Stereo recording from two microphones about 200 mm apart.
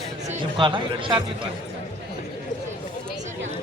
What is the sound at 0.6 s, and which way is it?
Speech, 25° right (ahead or behind).